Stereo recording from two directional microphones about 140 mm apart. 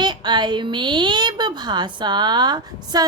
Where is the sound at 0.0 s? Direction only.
30° right (ahead or behind).